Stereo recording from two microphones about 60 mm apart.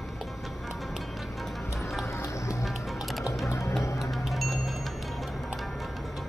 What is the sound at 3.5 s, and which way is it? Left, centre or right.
Music, left.